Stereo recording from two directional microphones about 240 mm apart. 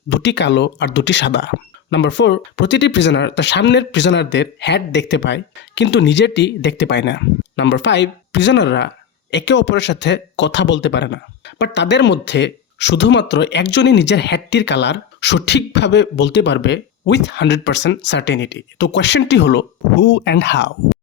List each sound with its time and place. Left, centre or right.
0.1 s speech: left